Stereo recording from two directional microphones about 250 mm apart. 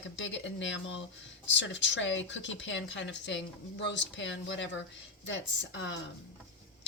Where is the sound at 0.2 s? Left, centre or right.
Left.